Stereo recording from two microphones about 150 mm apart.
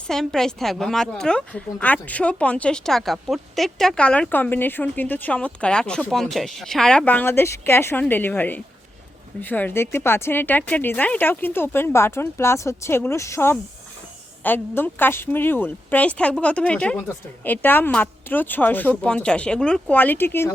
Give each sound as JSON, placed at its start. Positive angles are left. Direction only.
{"t": 0.1, "sound": "a woman's voice", "side_deg": 5}